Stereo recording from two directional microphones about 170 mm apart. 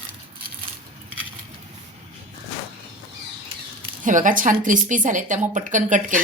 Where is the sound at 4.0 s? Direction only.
50° right (ahead or behind).